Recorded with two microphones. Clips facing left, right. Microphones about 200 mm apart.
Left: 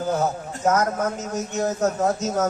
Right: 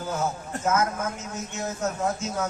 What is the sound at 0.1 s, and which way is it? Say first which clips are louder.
A man's voice: left 3 dB; 40° left (ahead or behind).